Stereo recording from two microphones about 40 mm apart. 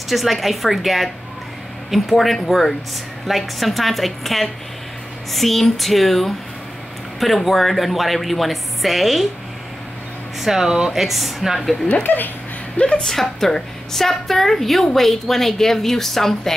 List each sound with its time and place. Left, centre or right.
0.1 s a woman's voice: centre
10.4 s a woman's voice: centre
11.9 s speech: left
12.7 s speech: left
13.0 s a woman's voice: centre